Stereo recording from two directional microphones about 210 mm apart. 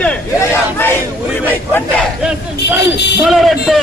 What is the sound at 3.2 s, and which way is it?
Speech, centre (ahead or behind).